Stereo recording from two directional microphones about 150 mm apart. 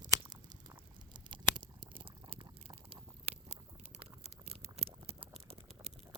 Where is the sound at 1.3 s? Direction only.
35° right (ahead or behind).